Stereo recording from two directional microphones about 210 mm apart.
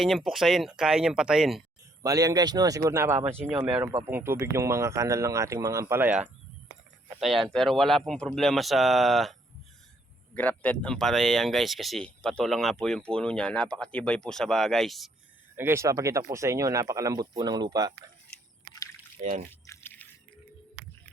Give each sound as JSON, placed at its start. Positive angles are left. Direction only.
{"t": 0.0, "sound": "speech", "side_deg": 0}
{"t": 2.0, "sound": "speech", "side_deg": -15}
{"t": 10.3, "sound": "speech", "side_deg": 5}
{"t": 15.5, "sound": "speech", "side_deg": -10}
{"t": 19.5, "sound": "a sound", "side_deg": 10}